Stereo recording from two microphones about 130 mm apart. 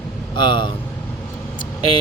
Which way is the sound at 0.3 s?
35° left (ahead or behind).